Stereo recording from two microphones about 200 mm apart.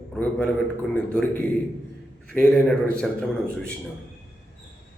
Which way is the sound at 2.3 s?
5° left (ahead or behind).